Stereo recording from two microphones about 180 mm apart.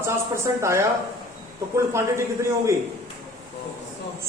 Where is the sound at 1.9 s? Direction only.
15° right (ahead or behind).